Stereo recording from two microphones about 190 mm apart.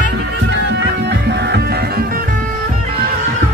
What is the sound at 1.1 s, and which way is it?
Music, 65° right (ahead or behind).